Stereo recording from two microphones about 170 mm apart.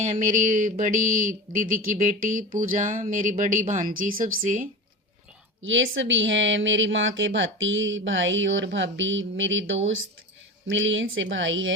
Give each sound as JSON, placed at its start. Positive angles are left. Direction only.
{"t": 0.0, "sound": "speech", "side_deg": -50}
{"t": 5.6, "sound": "a woman's voice", "side_deg": -90}